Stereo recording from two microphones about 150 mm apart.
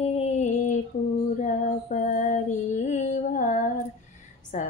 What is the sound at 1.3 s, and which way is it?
Female singing, 55° left (ahead or behind).